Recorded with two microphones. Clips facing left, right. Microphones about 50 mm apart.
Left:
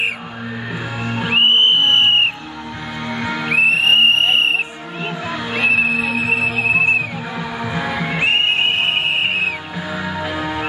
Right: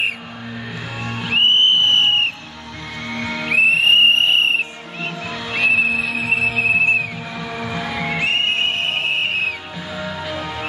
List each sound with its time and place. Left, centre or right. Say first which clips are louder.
1.0 s music: left 2 dB; centre
3.1 s music: left 1 dB; centre
8.2 s music: left 3 dB; left